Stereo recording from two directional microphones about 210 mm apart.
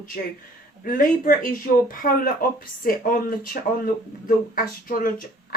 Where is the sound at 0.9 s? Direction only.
40° left (ahead or behind).